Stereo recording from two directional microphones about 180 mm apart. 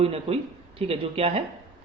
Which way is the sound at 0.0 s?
35° right (ahead or behind).